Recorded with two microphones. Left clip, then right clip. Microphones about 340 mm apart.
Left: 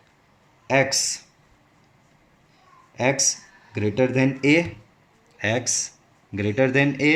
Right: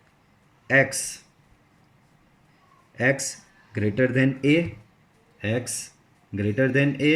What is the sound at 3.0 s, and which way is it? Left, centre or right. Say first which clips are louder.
Speech: left 2 dB; centre.